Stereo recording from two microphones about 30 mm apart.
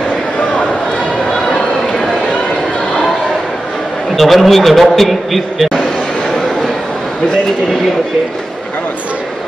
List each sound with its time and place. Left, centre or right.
4.2 s a man's voice: centre